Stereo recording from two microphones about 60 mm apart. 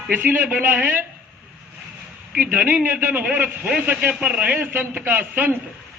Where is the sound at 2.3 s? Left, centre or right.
Right.